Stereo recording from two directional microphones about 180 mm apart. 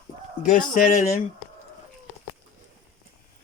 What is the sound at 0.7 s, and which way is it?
Speech, 45° left (ahead or behind).